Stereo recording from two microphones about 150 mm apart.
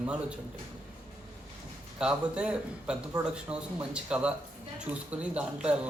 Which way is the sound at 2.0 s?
5° right (ahead or behind).